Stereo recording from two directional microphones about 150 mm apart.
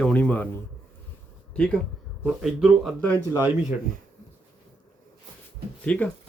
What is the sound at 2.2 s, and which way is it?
Speech, 5° right (ahead or behind).